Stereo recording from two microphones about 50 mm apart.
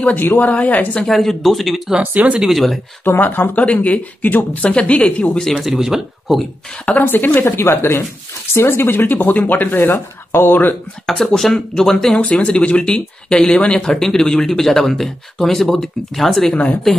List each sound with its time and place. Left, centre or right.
0.4 s speech: left
1.0 s speech: centre
2.0 s speech: right
2.4 s speech: centre
3.2 s speech: left
3.6 s speech: left
5.5 s speech: centre
7.0 s speech: left
7.5 s speech: left
11.1 s speech: centre
12.2 s speech: left; by 17.0 s centre